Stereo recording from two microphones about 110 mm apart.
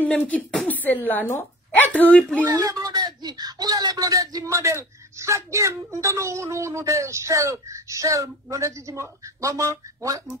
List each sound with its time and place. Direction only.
0.2 s speech: 15° left (ahead or behind)
2.4 s speech: 35° right (ahead or behind)